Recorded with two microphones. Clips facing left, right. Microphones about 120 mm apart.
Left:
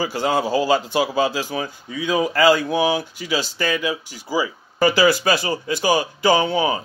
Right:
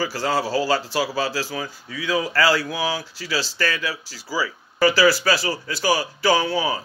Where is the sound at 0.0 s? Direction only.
20° left (ahead or behind).